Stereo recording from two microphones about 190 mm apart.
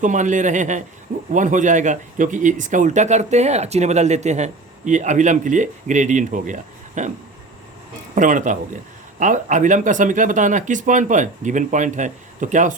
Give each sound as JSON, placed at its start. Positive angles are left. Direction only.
{"t": 0.0, "sound": "speech", "side_deg": -40}
{"t": 8.1, "sound": "speech", "side_deg": -45}